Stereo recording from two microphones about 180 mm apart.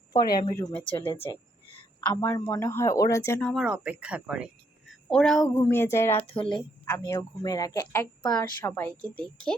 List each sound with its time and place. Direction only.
0.1 s speech: 20° left (ahead or behind)
1.2 s speech: 20° left (ahead or behind)
3.5 s speech: 5° right (ahead or behind)
4.9 s a sound: 5° left (ahead or behind)
5.5 s speech: 15° left (ahead or behind)
6.1 s speech: 30° left (ahead or behind); by 9.6 s 5° left (ahead or behind)